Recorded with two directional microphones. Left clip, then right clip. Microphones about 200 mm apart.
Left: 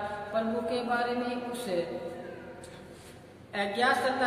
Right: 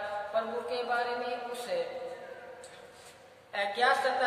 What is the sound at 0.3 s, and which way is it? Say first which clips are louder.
Speech: left 3 dB; 10° left (ahead or behind).